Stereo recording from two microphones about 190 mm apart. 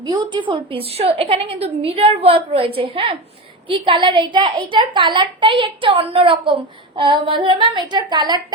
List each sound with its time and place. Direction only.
0.0 s a woman's voice: 25° right (ahead or behind)